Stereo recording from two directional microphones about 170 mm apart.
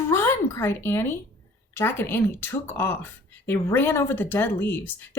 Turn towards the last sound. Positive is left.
turn(degrees=10)  # may be behind; listen again after turning